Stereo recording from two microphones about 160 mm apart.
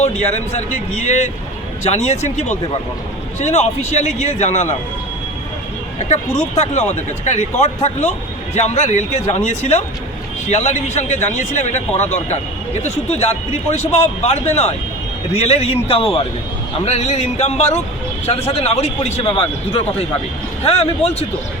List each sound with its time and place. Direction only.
1.0 s speech: 45° left (ahead or behind)
6.0 s a man's voice: 45° left (ahead or behind)